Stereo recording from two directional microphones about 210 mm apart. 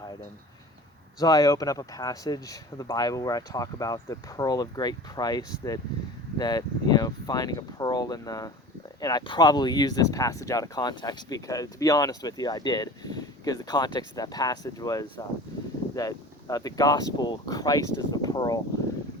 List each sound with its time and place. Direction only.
1.2 s speech: 15° left (ahead or behind)